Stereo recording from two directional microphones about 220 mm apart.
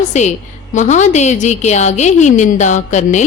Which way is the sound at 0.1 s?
30° left (ahead or behind).